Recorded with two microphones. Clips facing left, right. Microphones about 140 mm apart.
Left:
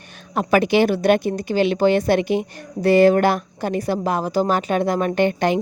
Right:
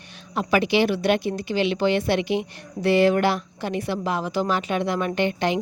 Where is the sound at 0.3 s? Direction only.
50° left (ahead or behind).